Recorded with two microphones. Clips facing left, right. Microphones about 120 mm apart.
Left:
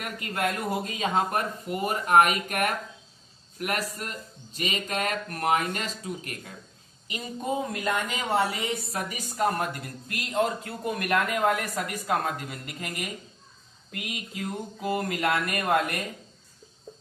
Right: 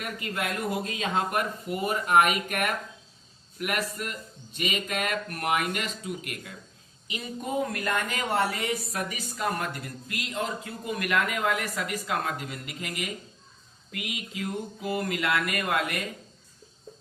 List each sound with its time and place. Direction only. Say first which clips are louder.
0.0 s speech: left 3 dB; 45° left (ahead or behind)
7.4 s speech: left 1 dB; 20° left (ahead or behind)
9.0 s speech: left 7 dB; 45° left (ahead or behind)